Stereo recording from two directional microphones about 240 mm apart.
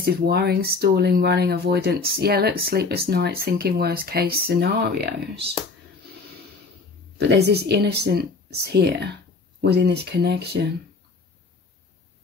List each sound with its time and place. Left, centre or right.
0.0 s speech: right
7.2 s speech: right